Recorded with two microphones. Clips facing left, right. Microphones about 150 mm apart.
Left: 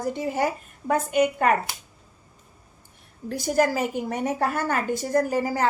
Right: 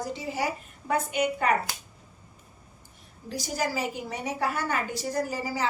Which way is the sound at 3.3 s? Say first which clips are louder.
Left 8 dB; 55° left (ahead or behind).